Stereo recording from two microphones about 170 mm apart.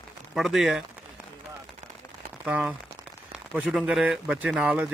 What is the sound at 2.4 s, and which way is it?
A man's voice, 5° right (ahead or behind).